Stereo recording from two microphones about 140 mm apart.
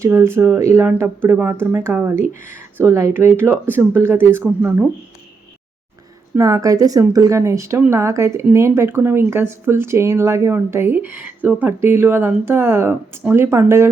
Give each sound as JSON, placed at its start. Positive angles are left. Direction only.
{"t": 0.0, "sound": "speech", "side_deg": -15}
{"t": 6.3, "sound": "speech", "side_deg": -25}